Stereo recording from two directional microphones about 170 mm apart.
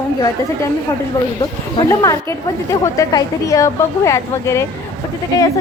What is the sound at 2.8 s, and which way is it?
A woman's voice, 20° left (ahead or behind).